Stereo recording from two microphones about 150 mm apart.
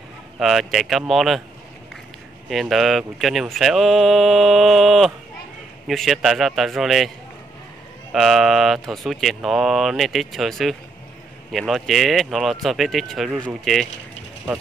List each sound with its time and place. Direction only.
0.4 s speech: centre (ahead or behind)
2.5 s speech: centre (ahead or behind)
8.1 s speech: centre (ahead or behind)